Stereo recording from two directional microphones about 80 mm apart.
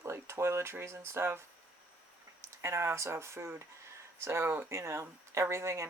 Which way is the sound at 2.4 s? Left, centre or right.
Right.